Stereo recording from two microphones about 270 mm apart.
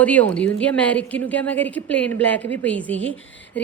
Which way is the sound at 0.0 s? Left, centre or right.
Centre.